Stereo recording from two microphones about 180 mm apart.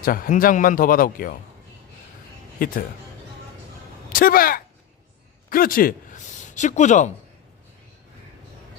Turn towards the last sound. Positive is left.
turn(degrees=40)  # may be behind; listen again after turning